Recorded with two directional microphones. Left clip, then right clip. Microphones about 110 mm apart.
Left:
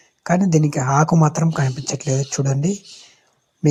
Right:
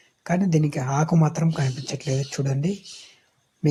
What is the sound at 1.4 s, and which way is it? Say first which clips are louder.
Speech: left 5 dB; 25° left (ahead or behind).